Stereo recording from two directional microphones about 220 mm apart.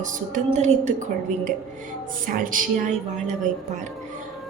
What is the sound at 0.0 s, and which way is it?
A woman's voice, 35° right (ahead or behind).